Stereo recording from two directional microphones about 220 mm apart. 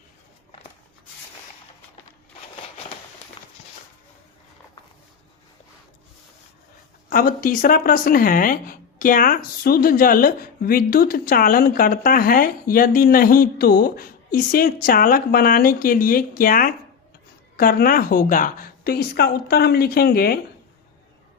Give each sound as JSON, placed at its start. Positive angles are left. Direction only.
{"t": 7.1, "sound": "a woman's voice", "side_deg": 40}